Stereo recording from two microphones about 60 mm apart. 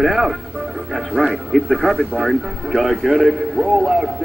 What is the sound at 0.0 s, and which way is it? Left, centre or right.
Speech, centre.